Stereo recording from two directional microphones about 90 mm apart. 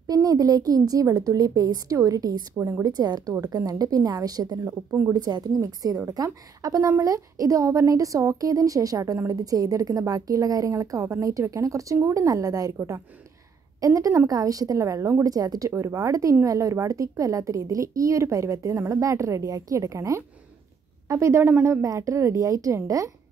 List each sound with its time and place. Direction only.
0.0 s a woman's voice: 40° right (ahead or behind)
2.5 s a woman's voice: 35° right (ahead or behind)
21.8 s a woman's voice: 35° right (ahead or behind)